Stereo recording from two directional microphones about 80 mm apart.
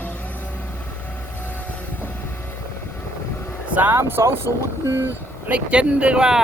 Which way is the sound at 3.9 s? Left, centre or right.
Right.